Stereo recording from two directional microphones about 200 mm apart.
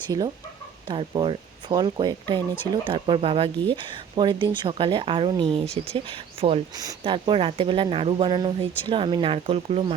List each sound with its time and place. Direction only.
0.1 s speech: 20° right (ahead or behind)